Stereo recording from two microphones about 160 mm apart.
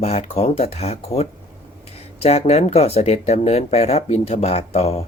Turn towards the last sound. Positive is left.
turn(degrees=40)  # may be behind; listen again after turning